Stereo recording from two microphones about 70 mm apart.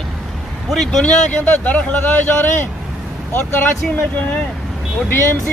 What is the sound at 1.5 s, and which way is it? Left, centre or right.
Speech, left.